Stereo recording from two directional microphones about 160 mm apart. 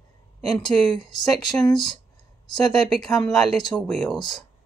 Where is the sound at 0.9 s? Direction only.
25° left (ahead or behind).